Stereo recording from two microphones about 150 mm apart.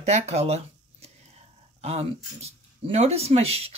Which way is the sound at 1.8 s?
40° right (ahead or behind).